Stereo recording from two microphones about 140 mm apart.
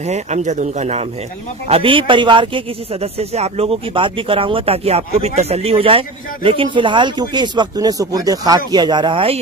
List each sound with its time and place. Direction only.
0.0 s speech: 55° right (ahead or behind)
1.7 s a man's voice: 40° right (ahead or behind)